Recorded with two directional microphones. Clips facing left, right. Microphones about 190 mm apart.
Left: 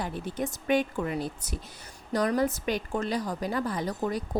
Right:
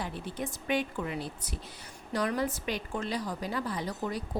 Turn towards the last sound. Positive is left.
turn(degrees=45)  # may be behind; listen again after turning